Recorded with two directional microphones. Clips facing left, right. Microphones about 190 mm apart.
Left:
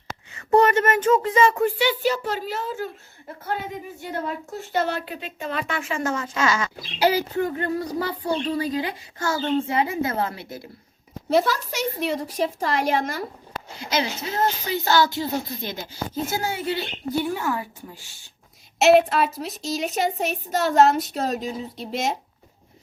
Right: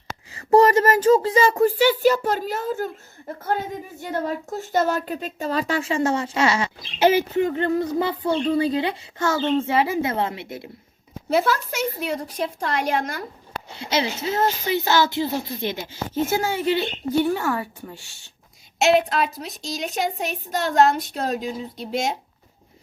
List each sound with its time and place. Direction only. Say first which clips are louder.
0.3 s a woman's voice: right 3 dB; 35° right (ahead or behind)
11.3 s a woman's voice: even; centre (ahead or behind)
13.7 s a woman's voice: right 2 dB; 30° right (ahead or behind)
18.8 s a woman's voice: left 2 dB; centre (ahead or behind)